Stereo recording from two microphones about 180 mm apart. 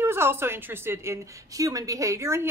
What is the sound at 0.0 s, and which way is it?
A woman's voice, 15° right (ahead or behind).